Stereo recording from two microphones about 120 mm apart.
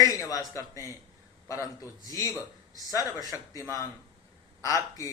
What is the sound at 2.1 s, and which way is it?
A man's voice, 25° left (ahead or behind).